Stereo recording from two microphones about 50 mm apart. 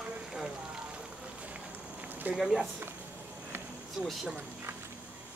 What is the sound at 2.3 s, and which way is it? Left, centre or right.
Speech, centre.